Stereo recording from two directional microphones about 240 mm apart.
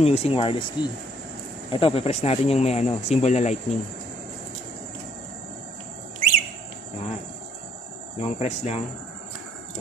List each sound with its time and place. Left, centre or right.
0.0 s speech: left
8.2 s speech: left